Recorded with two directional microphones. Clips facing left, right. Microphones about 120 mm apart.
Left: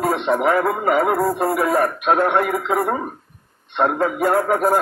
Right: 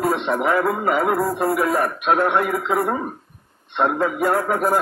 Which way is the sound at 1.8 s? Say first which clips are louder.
Left 2 dB; 10° left (ahead or behind).